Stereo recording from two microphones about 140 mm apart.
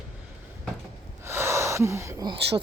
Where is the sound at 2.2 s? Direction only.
40° right (ahead or behind).